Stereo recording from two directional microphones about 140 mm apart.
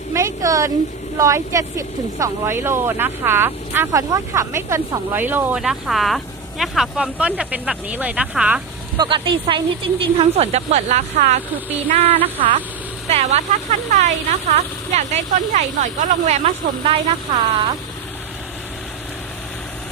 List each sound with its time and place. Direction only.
0.1 s a sound: 20° right (ahead or behind)
1.2 s speech: 25° right (ahead or behind); by 8.6 s 5° right (ahead or behind)
9.0 s speech: 35° right (ahead or behind); by 11.3 s 55° right (ahead or behind)
11.9 s speech: 45° right (ahead or behind)